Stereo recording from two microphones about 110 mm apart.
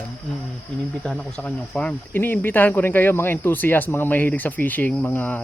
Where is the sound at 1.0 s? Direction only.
10° left (ahead or behind).